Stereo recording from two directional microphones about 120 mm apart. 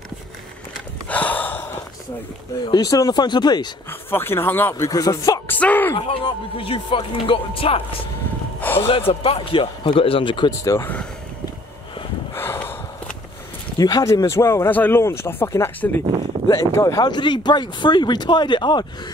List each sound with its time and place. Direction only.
1.0 s gasp: 10° left (ahead or behind)
2.6 s speech: 35° left (ahead or behind)
4.1 s speech: 20° left (ahead or behind)
5.5 s speech: 15° left (ahead or behind)
5.9 s speech: 50° left (ahead or behind)
8.5 s a sound: 15° left (ahead or behind)
8.8 s speech: 50° left (ahead or behind)
10.6 s speech: 25° left (ahead or behind)
12.4 s snort: 20° left (ahead or behind)
13.7 s speech: 30° left (ahead or behind)
14.2 s speech: 20° left (ahead or behind); by 18.9 s 40° left (ahead or behind)